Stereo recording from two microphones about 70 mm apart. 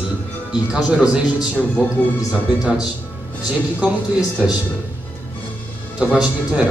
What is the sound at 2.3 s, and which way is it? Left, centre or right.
Speech, centre.